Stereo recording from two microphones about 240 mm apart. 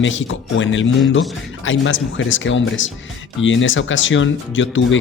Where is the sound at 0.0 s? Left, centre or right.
Left.